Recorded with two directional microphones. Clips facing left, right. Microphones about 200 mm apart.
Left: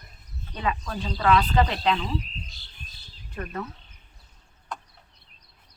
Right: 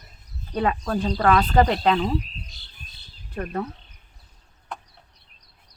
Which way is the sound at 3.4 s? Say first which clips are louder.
Right 5 dB; 40° right (ahead or behind).